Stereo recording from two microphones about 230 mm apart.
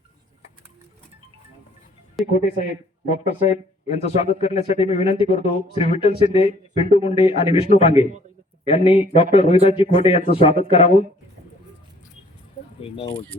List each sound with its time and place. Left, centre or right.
2.2 s speech: centre
3.1 s speech: left